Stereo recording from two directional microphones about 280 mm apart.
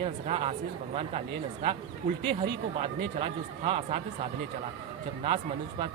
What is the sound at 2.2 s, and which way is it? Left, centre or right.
Speech, right.